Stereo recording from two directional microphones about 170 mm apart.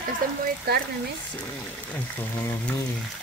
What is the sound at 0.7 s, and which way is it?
Speech, 70° right (ahead or behind).